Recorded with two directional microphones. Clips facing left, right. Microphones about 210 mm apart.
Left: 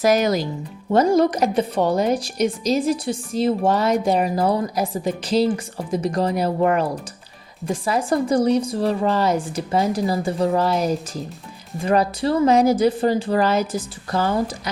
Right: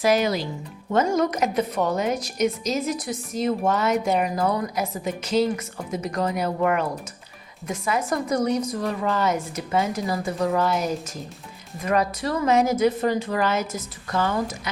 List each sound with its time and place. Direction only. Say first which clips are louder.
0.0 s speech: left 3 dB; 40° left (ahead or behind)
0.9 s a woman's voice: left 5 dB; 30° left (ahead or behind)